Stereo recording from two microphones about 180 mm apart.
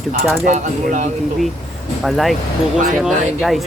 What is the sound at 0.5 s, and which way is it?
Speech, 45° right (ahead or behind).